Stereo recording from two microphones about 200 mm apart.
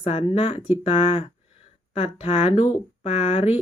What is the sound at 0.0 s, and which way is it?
Speech, 30° left (ahead or behind).